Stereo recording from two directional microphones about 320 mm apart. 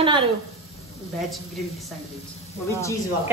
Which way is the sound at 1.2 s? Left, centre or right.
Centre.